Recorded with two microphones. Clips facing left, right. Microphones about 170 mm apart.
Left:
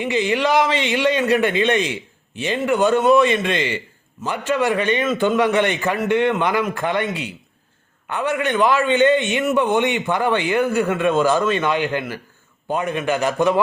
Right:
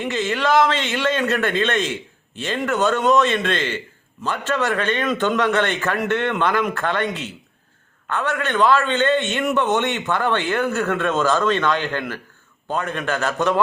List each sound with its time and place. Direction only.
0.0 s a man's voice: 15° left (ahead or behind)